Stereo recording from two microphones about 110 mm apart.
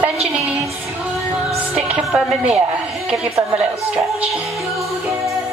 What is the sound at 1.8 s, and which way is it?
Speech, 10° right (ahead or behind).